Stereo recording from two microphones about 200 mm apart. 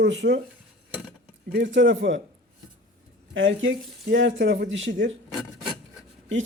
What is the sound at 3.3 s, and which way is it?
Speech, 70° right (ahead or behind).